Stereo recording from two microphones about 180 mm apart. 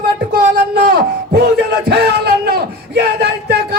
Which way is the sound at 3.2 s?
65° right (ahead or behind).